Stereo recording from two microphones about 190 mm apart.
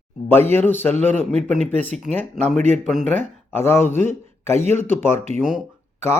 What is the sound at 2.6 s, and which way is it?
Speech, 40° right (ahead or behind).